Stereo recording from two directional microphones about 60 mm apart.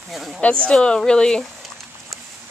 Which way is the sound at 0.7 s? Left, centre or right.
Centre.